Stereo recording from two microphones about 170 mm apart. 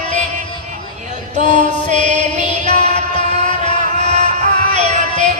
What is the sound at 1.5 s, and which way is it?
Music, 45° right (ahead or behind).